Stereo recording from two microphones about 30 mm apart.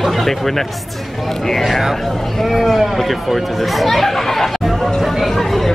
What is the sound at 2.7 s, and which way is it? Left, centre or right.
Speech, centre.